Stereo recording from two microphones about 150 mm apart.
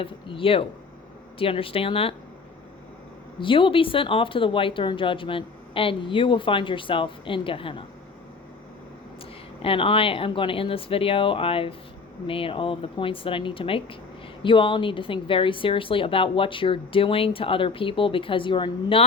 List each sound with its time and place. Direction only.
0.0 s a woman's voice: 35° left (ahead or behind)
3.4 s a woman's voice: 35° left (ahead or behind)
9.6 s a woman's voice: 35° left (ahead or behind)